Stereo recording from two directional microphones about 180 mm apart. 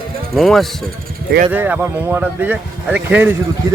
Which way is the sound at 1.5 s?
10° right (ahead or behind).